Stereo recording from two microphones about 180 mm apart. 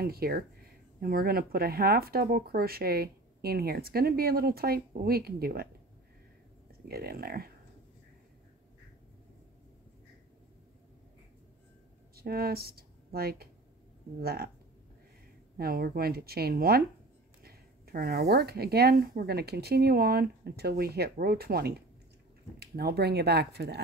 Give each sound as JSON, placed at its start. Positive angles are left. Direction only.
{"t": 0.0, "sound": "speech", "side_deg": -60}
{"t": 6.9, "sound": "speech", "side_deg": -60}
{"t": 12.2, "sound": "speech", "side_deg": -60}
{"t": 15.5, "sound": "speech", "side_deg": -60}